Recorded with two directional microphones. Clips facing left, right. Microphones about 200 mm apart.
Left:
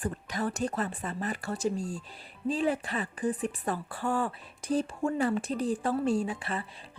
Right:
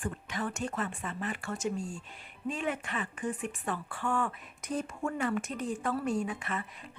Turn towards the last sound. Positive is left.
turn(degrees=30)  # may be behind; listen again after turning